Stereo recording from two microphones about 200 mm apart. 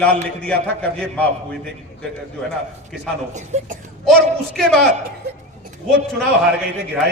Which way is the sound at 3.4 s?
35° right (ahead or behind).